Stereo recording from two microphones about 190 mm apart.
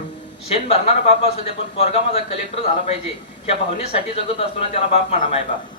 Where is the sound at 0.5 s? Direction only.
30° left (ahead or behind).